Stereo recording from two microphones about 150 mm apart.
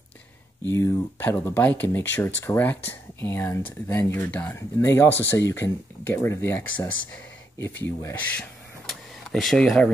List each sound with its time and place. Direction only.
0.7 s speech: 15° left (ahead or behind)